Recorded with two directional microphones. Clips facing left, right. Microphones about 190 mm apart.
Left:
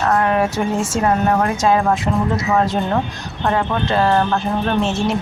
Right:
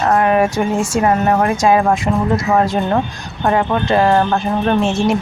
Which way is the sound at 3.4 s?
15° right (ahead or behind).